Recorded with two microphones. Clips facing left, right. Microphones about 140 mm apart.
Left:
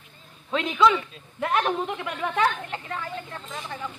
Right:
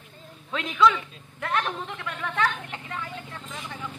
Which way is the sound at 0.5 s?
5° left (ahead or behind).